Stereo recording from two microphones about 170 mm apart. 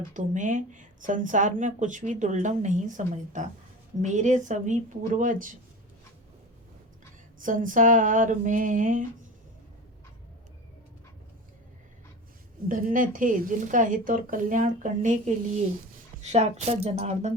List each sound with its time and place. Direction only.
0.1 s speech: 50° right (ahead or behind)
7.4 s speech: 50° right (ahead or behind)
12.6 s a woman's voice: 50° right (ahead or behind)